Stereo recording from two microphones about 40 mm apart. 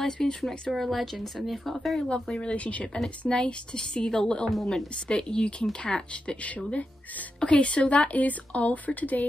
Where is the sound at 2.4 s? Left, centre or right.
Left.